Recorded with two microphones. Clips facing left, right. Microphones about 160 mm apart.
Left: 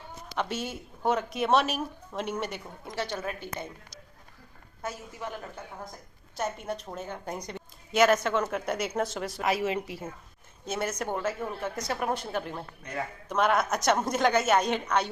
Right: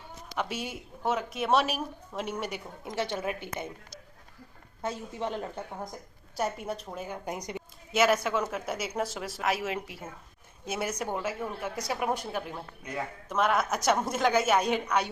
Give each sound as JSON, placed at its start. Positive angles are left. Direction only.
{"t": 0.3, "sound": "a woman's voice", "side_deg": -10}
{"t": 2.8, "sound": "a woman's voice", "side_deg": -20}
{"t": 4.8, "sound": "a woman's voice", "side_deg": -25}
{"t": 6.4, "sound": "a woman's voice", "side_deg": -10}